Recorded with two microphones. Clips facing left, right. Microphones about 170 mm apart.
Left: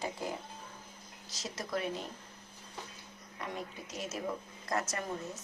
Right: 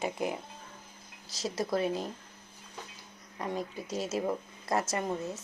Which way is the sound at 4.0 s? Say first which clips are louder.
Right 6 dB; 30° right (ahead or behind).